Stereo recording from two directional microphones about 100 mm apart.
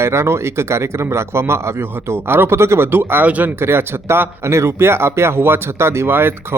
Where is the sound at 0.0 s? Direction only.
25° right (ahead or behind).